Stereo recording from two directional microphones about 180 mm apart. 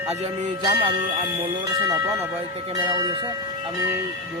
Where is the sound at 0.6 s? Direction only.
25° right (ahead or behind).